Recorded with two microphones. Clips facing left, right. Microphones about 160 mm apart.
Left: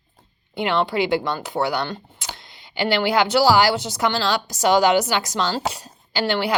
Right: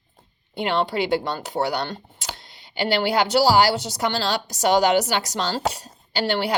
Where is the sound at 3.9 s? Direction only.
35° right (ahead or behind).